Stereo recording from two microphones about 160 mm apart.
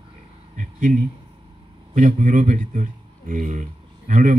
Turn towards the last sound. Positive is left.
turn(degrees=-55)  # may be behind; listen again after turning